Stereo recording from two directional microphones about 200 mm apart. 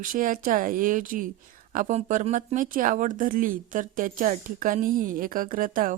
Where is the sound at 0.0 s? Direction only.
40° right (ahead or behind).